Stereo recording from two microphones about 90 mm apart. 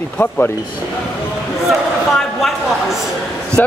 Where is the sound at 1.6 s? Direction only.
Centre (ahead or behind).